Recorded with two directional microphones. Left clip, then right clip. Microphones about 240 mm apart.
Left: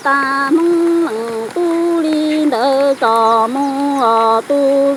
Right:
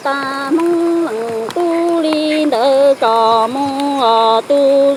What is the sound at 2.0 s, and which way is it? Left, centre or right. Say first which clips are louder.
Music: right 1 dB; centre.